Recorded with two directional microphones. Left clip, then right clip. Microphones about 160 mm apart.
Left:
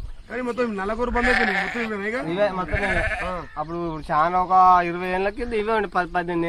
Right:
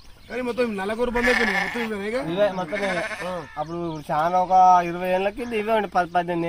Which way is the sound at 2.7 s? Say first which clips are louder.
Left 2 dB; 70° right (ahead or behind).